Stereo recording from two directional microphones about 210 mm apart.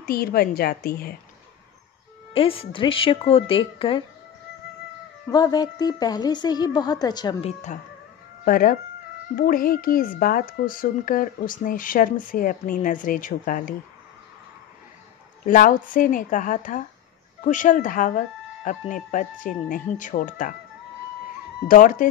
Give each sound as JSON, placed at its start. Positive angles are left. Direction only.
{"t": 0.0, "sound": "a woman's voice", "side_deg": 45}
{"t": 2.3, "sound": "a woman's voice", "side_deg": 25}
{"t": 5.3, "sound": "a woman's voice", "side_deg": 20}
{"t": 8.5, "sound": "a woman's voice", "side_deg": 45}
{"t": 15.4, "sound": "speech", "side_deg": 40}
{"t": 21.6, "sound": "speech", "side_deg": 40}